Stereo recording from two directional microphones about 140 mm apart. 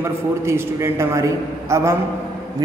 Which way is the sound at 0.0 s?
20° right (ahead or behind).